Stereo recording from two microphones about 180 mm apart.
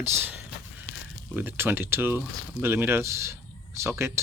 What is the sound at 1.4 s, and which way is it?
Speech, 10° right (ahead or behind).